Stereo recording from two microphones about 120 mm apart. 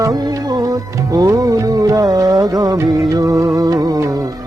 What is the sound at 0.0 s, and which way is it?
Music, 30° right (ahead or behind).